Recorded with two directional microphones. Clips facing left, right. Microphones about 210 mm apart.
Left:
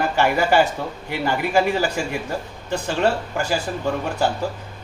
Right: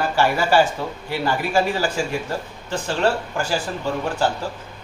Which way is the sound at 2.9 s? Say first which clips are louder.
Even; 15° left (ahead or behind).